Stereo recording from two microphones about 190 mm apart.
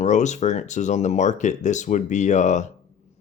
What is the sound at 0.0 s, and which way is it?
Speech, 40° left (ahead or behind).